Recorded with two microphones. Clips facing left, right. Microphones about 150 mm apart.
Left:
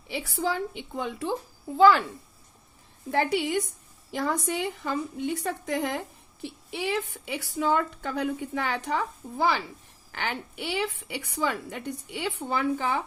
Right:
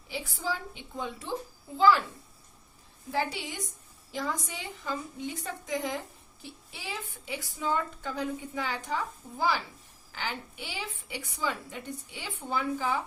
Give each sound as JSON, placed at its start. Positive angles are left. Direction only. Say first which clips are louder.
{"t": 0.1, "sound": "a woman's voice", "louder": "left 5 dB", "side_deg": 65}
{"t": 3.1, "sound": "a woman's voice", "louder": "left 7 dB", "side_deg": 60}